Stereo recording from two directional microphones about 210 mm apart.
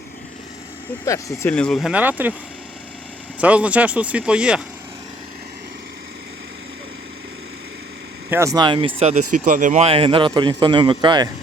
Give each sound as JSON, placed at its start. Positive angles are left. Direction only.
{"t": 1.0, "sound": "speech", "side_deg": 15}
{"t": 3.4, "sound": "speech", "side_deg": -5}
{"t": 8.3, "sound": "a man's voice", "side_deg": -15}